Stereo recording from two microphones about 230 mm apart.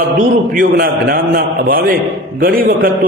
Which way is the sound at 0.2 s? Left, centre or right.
Right.